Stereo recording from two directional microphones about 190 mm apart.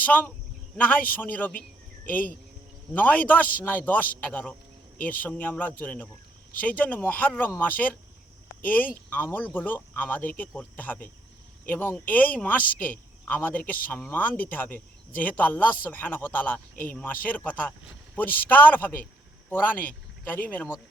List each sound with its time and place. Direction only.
0.0 s speech: 10° left (ahead or behind)
2.9 s speech: 10° left (ahead or behind)